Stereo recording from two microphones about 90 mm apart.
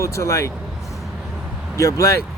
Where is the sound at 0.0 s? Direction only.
30° left (ahead or behind).